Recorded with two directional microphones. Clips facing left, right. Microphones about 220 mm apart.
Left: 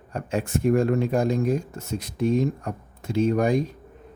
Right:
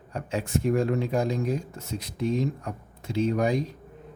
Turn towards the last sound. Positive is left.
turn(degrees=50)  # may be behind; listen again after turning